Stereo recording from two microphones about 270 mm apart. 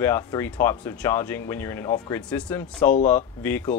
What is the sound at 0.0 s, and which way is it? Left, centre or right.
Speech, centre.